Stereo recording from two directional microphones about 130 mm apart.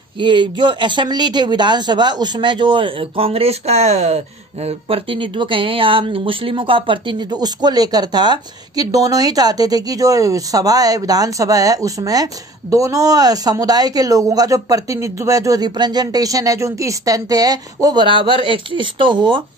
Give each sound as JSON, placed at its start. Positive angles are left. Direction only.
{"t": 0.2, "sound": "speech", "side_deg": -35}
{"t": 18.0, "sound": "speech", "side_deg": -40}